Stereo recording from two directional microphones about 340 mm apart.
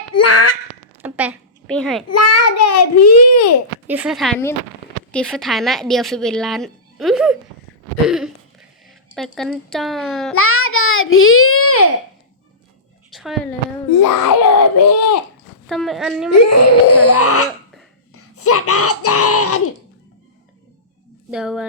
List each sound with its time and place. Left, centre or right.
0.1 s quack: left
1.0 s a child's voice: centre
2.0 s a child's voice: left
3.8 s a woman's voice: centre
10.3 s a child's voice: left
13.1 s a sound: centre
14.6 s a child's voice: left
15.7 s a woman's voice: centre
16.3 s a child's voice: left
21.2 s a woman's voice: centre